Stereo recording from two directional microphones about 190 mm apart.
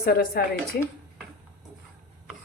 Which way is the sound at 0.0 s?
50° left (ahead or behind).